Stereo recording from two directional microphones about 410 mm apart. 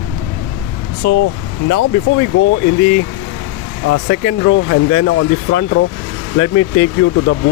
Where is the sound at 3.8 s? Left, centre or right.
Left.